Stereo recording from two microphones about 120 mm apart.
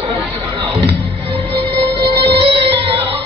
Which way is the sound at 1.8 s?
50° right (ahead or behind).